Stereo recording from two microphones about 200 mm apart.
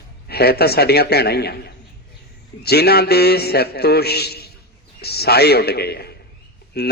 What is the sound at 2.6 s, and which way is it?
A man's voice, 55° left (ahead or behind).